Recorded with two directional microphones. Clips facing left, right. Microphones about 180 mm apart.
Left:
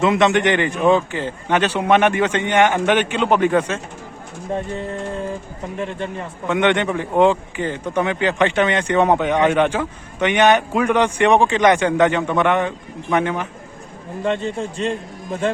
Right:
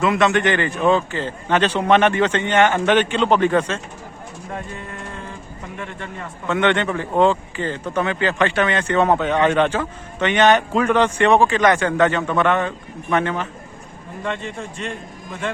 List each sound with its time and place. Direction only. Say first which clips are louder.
0.0 s speech: left 2 dB; 20° left (ahead or behind)
4.5 s a man's voice: left 7 dB; 30° left (ahead or behind)
5.7 s a man's voice: left 7 dB; 30° left (ahead or behind)
6.5 s speech: left 1 dB; 15° left (ahead or behind)
14.3 s a man's voice: left 6 dB; 30° left (ahead or behind)